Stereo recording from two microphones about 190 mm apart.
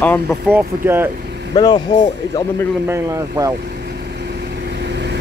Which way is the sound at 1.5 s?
20° left (ahead or behind).